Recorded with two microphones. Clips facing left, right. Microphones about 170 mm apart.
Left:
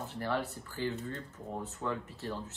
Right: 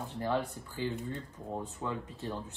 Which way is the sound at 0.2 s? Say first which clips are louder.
Right 2 dB; 15° right (ahead or behind).